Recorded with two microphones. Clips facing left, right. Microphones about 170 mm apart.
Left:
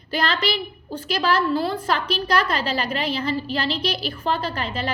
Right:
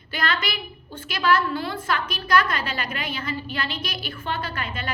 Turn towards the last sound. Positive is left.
turn(degrees=35)  # may be behind; listen again after turning